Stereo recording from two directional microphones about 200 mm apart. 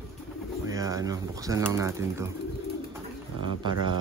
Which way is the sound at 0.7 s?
15° right (ahead or behind).